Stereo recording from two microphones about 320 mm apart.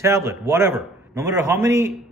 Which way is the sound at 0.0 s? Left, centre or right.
Centre.